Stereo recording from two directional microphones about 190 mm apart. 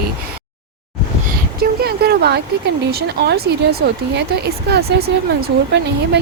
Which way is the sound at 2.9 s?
55° right (ahead or behind).